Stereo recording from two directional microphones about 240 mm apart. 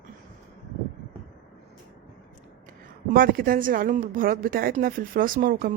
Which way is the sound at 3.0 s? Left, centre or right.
Right.